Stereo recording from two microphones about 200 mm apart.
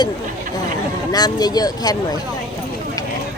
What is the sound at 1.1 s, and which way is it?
Speech, 20° left (ahead or behind).